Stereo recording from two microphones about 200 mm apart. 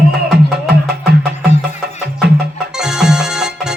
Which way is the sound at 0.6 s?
50° right (ahead or behind).